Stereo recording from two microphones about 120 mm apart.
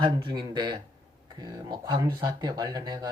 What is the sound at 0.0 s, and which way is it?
Speech, 40° right (ahead or behind).